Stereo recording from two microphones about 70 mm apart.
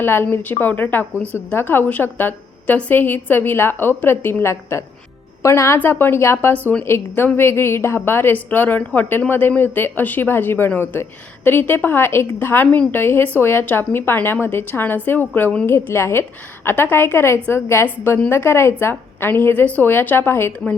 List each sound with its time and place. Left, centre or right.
0.0 s a woman's voice: left